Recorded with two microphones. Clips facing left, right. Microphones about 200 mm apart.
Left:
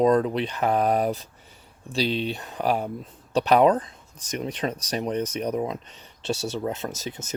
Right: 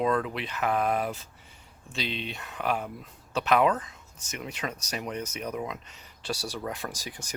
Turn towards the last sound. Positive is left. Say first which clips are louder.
# left 6 dB
turn(degrees=25)  # may be behind; listen again after turning